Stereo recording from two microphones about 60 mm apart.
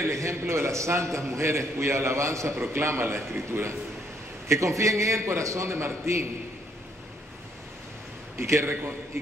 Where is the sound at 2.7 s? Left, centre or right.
Right.